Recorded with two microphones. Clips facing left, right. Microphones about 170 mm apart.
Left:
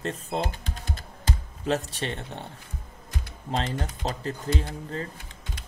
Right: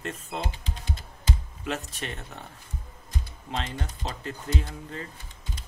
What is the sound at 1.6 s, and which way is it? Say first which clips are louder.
Speech: left 6 dB; 35° left (ahead or behind).